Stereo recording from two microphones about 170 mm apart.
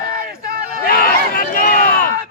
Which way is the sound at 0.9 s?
60° left (ahead or behind).